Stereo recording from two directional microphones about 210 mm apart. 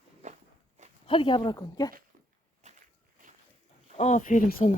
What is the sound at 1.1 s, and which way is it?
Speech, 25° left (ahead or behind).